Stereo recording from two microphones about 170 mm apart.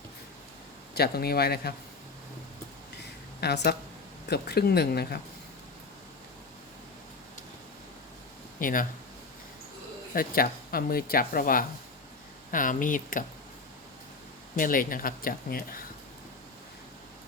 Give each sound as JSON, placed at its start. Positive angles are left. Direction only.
{"t": 0.9, "sound": "speech", "side_deg": 65}
{"t": 3.4, "sound": "speech", "side_deg": 70}
{"t": 8.5, "sound": "speech", "side_deg": 55}
{"t": 10.2, "sound": "speech", "side_deg": 60}
{"t": 14.5, "sound": "speech", "side_deg": 55}